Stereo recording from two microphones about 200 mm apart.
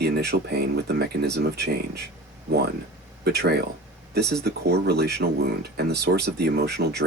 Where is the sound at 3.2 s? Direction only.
55° right (ahead or behind).